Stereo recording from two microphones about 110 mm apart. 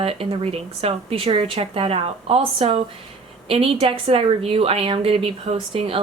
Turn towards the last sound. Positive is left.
turn(degrees=-55)  # may be behind; listen again after turning